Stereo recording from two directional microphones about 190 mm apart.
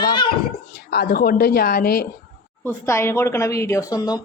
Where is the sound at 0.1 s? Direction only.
25° left (ahead or behind).